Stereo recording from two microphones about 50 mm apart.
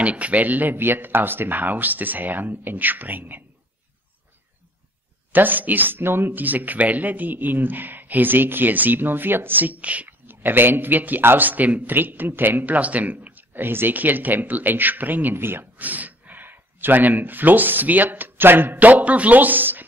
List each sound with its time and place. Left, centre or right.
0.0 s speech: right
5.3 s speech: right
10.2 s speech: right
15.8 s speech: right